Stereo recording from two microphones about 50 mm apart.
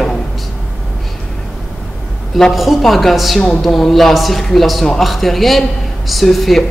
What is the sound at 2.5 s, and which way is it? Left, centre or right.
A man's voice, centre.